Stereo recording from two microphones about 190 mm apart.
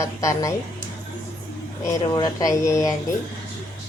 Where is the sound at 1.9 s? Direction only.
20° left (ahead or behind).